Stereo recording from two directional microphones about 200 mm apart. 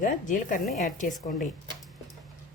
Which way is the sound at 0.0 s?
40° left (ahead or behind).